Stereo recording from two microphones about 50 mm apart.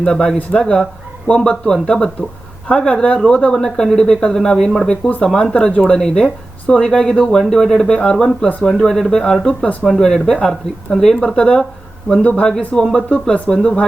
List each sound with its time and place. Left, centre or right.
0.0 s speech: centre
1.5 s speech: centre
3.5 s speech: centre; by 12.5 s left
12.5 s speech: centre